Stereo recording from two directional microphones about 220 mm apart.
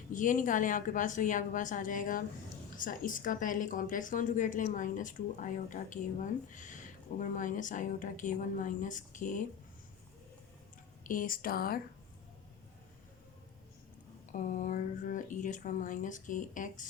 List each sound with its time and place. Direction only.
0.1 s a woman's voice: 35° left (ahead or behind)
11.0 s a woman's voice: 35° left (ahead or behind)
14.3 s a woman's voice: 35° left (ahead or behind)